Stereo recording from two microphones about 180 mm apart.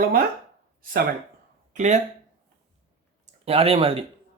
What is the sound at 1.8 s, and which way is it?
Speech, 40° right (ahead or behind).